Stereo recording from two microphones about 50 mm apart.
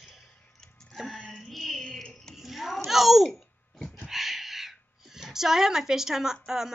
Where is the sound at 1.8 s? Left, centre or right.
Centre.